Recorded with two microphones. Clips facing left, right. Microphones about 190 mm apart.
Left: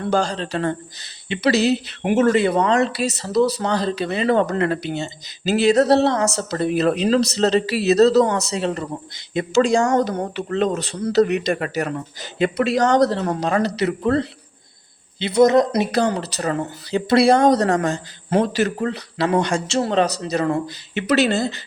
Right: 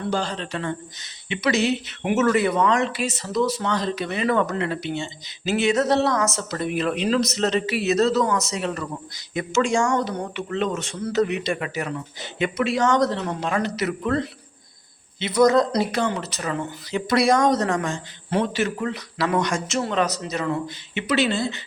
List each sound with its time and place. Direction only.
0.1 s speech: 40° left (ahead or behind)
4.5 s speech: 45° left (ahead or behind); by 15.9 s 20° left (ahead or behind)
15.9 s speech: 35° left (ahead or behind)